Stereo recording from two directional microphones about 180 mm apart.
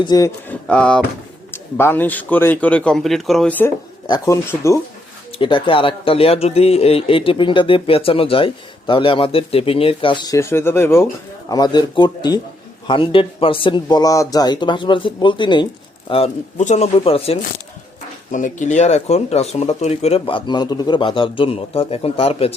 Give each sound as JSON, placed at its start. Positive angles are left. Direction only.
{"t": 0.0, "sound": "speech", "side_deg": 25}
{"t": 0.4, "sound": "mantra", "side_deg": 5}
{"t": 1.5, "sound": "a man's voice", "side_deg": 10}
{"t": 4.0, "sound": "a man's voice", "side_deg": 20}
{"t": 5.4, "sound": "speech", "side_deg": 25}
{"t": 18.3, "sound": "speech", "side_deg": 45}